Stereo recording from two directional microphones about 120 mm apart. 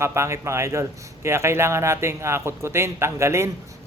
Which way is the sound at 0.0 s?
25° right (ahead or behind).